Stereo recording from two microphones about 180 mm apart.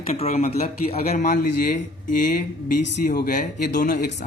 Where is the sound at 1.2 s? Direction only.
55° left (ahead or behind).